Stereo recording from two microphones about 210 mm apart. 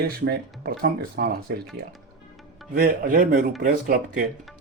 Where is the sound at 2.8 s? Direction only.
40° right (ahead or behind).